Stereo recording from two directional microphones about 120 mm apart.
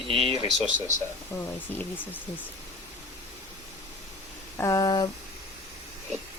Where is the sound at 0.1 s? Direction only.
50° right (ahead or behind).